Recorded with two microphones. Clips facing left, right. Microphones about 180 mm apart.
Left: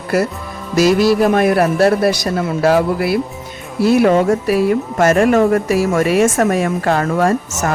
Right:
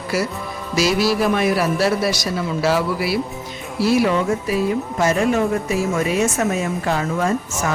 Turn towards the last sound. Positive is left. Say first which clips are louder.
# left 5 dB
turn(degrees=60)  # may be behind; listen again after turning